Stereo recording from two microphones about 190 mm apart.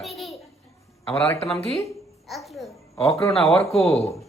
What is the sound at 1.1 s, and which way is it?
Speech, 10° left (ahead or behind).